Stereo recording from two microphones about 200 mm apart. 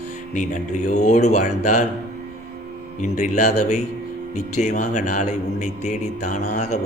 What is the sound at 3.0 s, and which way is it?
A man's voice, 35° left (ahead or behind).